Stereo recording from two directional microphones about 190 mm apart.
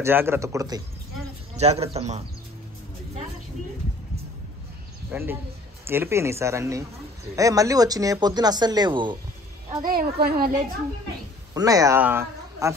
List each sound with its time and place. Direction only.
0.0 s speech: 10° right (ahead or behind)
1.6 s a man's voice: 35° right (ahead or behind)
5.1 s speech: 10° right (ahead or behind)
9.8 s a child's voice: 55° right (ahead or behind)
11.5 s speech: 20° right (ahead or behind)